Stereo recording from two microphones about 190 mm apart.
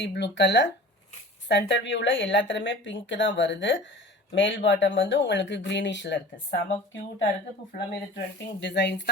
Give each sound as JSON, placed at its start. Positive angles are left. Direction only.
{"t": 0.0, "sound": "a woman's voice", "side_deg": 65}
{"t": 8.6, "sound": "speech", "side_deg": 65}